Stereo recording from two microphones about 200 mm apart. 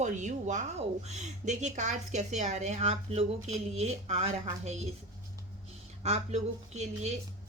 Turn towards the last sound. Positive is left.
turn(degrees=-35)  # may be behind; listen again after turning